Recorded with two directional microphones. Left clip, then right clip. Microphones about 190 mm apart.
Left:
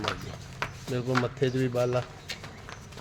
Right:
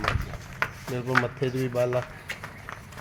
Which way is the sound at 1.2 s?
10° left (ahead or behind).